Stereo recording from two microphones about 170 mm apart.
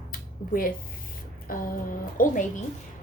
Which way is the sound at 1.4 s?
55° left (ahead or behind).